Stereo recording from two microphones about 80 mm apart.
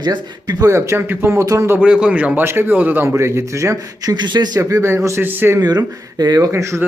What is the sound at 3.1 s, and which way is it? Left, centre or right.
Speech, right.